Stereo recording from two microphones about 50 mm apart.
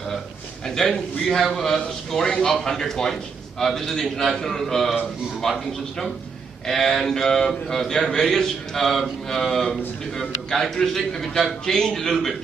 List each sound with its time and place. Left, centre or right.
0.7 s a man's voice: centre